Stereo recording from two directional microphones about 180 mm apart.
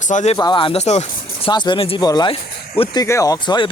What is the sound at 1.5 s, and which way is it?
Speech, 25° left (ahead or behind).